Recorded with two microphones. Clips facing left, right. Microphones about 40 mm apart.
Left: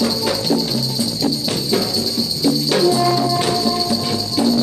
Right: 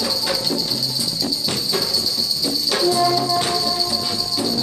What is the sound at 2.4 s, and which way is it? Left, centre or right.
Music, centre.